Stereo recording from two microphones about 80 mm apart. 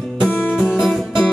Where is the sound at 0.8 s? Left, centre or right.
Centre.